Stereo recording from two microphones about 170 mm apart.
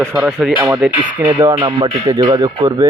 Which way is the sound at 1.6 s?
30° right (ahead or behind).